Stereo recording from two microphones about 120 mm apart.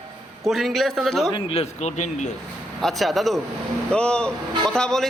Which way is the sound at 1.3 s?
50° left (ahead or behind).